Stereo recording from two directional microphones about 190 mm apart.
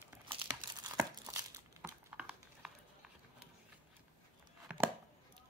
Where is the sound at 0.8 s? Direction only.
20° right (ahead or behind).